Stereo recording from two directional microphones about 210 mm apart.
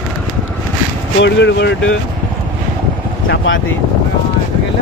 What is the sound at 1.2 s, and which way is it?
Speech, 60° left (ahead or behind).